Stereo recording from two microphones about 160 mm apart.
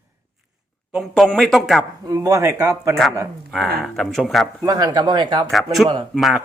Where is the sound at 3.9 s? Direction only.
Centre (ahead or behind).